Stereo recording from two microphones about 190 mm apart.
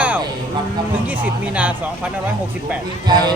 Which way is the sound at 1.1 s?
10° right (ahead or behind).